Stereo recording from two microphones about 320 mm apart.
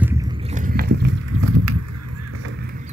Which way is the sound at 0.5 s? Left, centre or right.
Right.